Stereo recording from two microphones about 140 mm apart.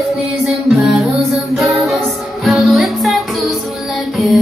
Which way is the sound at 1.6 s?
Centre (ahead or behind).